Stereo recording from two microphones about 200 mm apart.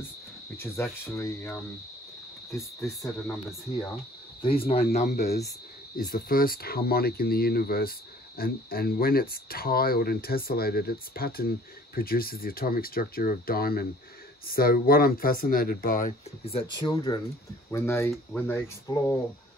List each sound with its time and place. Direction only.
1.0 s speech: 15° left (ahead or behind)
3.0 s speech: 15° left (ahead or behind)
4.4 s speech: 25° left (ahead or behind)
5.9 s speech: 45° left (ahead or behind)
16.4 s speech: 25° left (ahead or behind)